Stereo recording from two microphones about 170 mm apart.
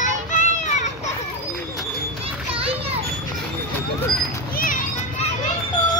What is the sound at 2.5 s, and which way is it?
Children playing, 35° right (ahead or behind).